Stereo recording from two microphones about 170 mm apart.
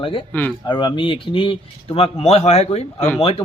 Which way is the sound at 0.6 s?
30° left (ahead or behind).